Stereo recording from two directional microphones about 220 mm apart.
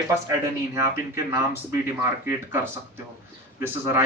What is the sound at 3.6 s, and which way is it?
Speech, 10° right (ahead or behind).